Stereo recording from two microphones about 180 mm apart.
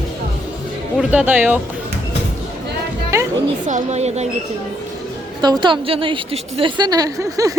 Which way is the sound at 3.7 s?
35° right (ahead or behind).